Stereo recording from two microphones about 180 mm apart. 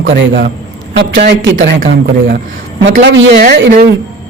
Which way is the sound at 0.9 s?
70° right (ahead or behind).